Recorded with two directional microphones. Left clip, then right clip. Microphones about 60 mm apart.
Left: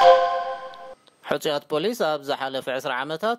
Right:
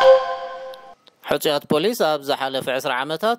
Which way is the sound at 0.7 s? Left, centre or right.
Right.